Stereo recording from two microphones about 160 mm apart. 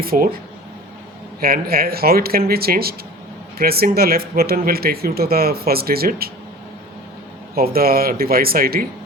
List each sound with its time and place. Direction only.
0.0 s speech: 65° right (ahead or behind)
1.4 s speech: 65° right (ahead or behind)
7.5 s speech: 70° right (ahead or behind)